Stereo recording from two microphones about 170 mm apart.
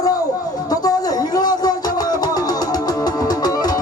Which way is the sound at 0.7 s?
20° left (ahead or behind).